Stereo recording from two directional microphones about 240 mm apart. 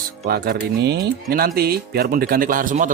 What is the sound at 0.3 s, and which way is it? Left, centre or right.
Speech, right.